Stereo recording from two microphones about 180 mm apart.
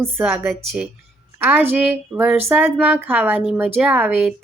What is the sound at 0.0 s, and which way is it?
A woman's voice, 10° right (ahead or behind).